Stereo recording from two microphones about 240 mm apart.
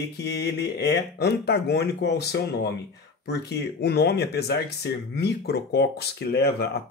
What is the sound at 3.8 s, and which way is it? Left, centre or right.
Speech, left.